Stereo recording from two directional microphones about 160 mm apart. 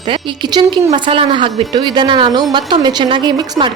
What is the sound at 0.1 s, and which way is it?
A woman's voice, 30° right (ahead or behind).